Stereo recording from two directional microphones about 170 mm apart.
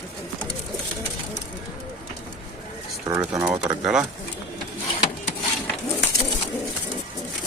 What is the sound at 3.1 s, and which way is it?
Speech, 15° right (ahead or behind).